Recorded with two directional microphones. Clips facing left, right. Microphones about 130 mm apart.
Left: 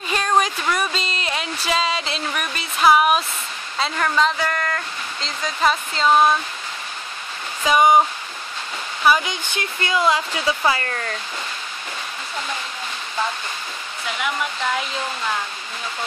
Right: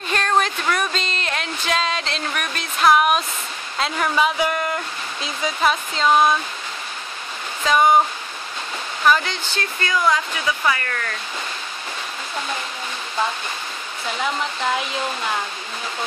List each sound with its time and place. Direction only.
0.1 s a sound: 10° left (ahead or behind)
3.7 s speech: centre (ahead or behind)
7.6 s speech: 10° left (ahead or behind)
9.0 s speech: 10° left (ahead or behind)
9.6 s speech: 20° left (ahead or behind)